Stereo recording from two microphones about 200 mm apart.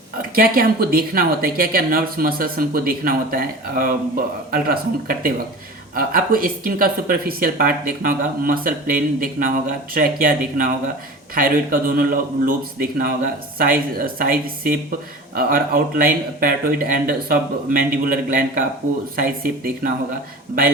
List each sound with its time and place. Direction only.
0.2 s speech: 45° right (ahead or behind)